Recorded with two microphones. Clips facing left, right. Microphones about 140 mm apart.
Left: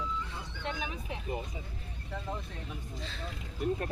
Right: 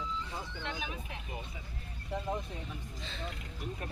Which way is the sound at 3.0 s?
Centre (ahead or behind).